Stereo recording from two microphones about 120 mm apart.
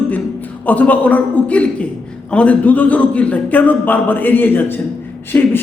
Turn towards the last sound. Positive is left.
turn(degrees=20)  # may be behind; listen again after turning